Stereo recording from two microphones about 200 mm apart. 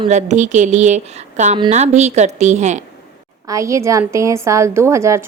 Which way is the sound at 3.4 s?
15° right (ahead or behind).